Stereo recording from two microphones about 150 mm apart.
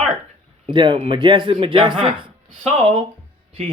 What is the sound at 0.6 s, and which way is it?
A man's voice, 35° right (ahead or behind).